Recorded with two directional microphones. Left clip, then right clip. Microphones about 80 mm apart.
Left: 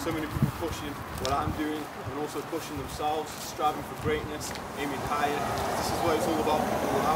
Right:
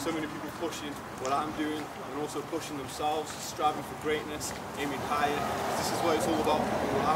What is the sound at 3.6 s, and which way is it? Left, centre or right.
Speech, centre.